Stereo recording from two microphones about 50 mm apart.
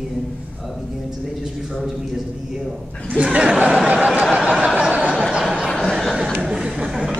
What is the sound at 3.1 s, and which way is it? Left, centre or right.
Speech, right.